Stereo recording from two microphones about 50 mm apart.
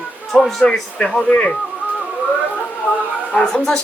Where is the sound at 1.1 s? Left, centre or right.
Left.